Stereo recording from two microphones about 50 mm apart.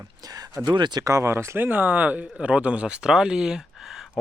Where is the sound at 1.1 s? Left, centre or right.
Right.